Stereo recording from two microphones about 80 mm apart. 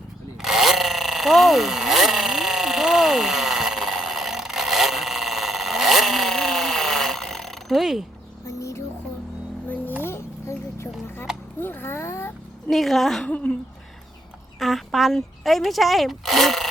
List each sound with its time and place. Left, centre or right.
0.4 s a sound: centre
8.4 s music: left
10.0 s a sound: left
12.7 s a woman's voice: centre
13.2 s speech: centre
14.6 s speech: centre